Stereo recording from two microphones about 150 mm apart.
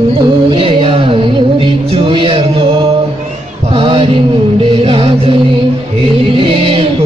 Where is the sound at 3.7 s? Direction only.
35° right (ahead or behind).